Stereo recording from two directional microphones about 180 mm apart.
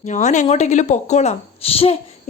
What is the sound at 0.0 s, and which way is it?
A woman's voice, 40° left (ahead or behind).